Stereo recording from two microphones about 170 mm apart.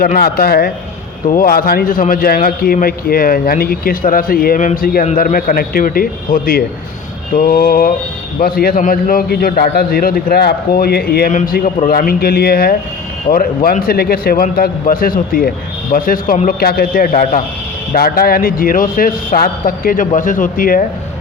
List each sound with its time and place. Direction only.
0.0 s a man's voice: 65° left (ahead or behind)
11.3 s a man's voice: 50° left (ahead or behind)